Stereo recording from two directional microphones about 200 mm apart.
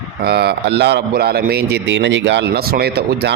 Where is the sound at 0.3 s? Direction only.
55° right (ahead or behind).